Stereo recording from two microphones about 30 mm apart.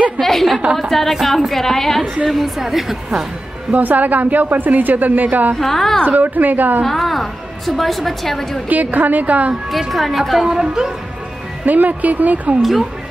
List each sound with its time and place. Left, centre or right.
0.2 s a sound: centre
0.7 s a woman's voice: centre
2.2 s a woman's voice: centre
3.7 s a woman's voice: right
5.6 s a woman's voice: centre
6.0 s a woman's voice: right
6.8 s a woman's voice: centre
8.6 s a woman's voice: right
9.7 s a woman's voice: centre
10.4 s a woman's voice: centre
11.6 s a woman's voice: right